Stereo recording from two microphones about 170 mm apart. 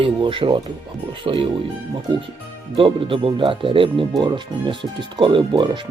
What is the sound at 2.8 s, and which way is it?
Speech, 30° right (ahead or behind).